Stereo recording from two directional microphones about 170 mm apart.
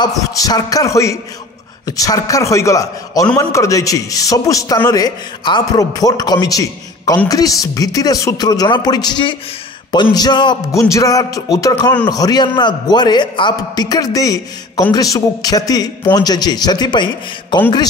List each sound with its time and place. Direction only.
0.0 s a man's voice: 20° left (ahead or behind)